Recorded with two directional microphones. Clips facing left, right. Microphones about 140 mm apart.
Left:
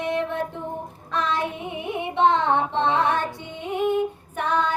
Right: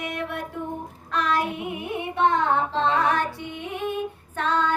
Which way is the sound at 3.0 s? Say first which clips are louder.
Even; 25° left (ahead or behind).